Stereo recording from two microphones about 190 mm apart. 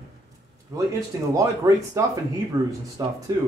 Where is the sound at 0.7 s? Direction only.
15° right (ahead or behind).